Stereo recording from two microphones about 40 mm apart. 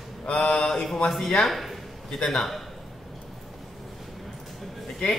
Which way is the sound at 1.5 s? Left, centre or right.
Centre.